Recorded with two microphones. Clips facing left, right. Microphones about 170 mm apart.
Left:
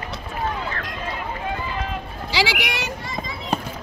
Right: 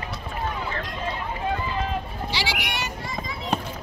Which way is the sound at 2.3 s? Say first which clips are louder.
Left 7 dB; 90° left.